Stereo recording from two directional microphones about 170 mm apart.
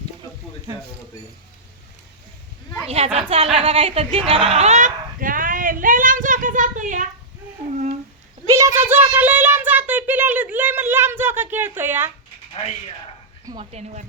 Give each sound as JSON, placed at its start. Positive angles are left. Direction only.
{"t": 2.8, "sound": "speech", "side_deg": -35}
{"t": 8.4, "sound": "a sound", "side_deg": -20}
{"t": 13.4, "sound": "speech", "side_deg": -25}
{"t": 13.7, "sound": "speech", "side_deg": -40}